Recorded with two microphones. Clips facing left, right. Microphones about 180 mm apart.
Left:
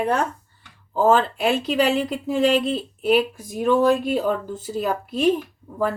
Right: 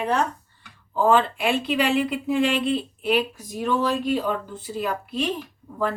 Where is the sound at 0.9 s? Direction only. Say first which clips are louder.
Left 2 dB; 40° left (ahead or behind).